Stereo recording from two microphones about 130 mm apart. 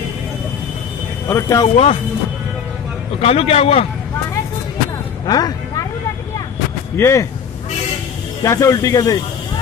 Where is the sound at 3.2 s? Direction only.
50° left (ahead or behind).